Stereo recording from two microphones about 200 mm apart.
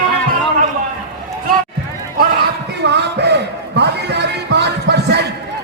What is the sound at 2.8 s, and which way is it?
Music, 60° right (ahead or behind).